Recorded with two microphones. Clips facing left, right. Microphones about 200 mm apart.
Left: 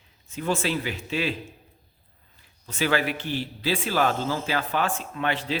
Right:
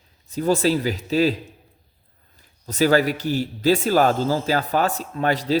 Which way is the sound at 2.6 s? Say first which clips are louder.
Right 7 dB; 40° right (ahead or behind).